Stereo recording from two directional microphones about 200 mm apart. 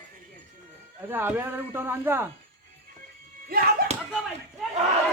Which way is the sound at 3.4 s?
50° right (ahead or behind).